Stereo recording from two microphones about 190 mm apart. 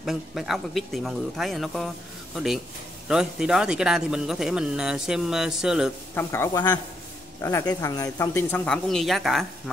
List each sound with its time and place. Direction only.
0.0 s speech: centre (ahead or behind)
6.1 s speech: 15° left (ahead or behind)